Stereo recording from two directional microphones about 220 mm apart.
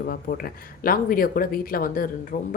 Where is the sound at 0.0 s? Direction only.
45° left (ahead or behind).